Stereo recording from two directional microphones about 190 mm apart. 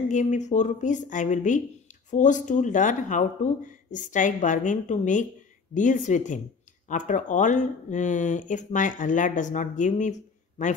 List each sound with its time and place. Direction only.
0.1 s speech: 40° left (ahead or behind)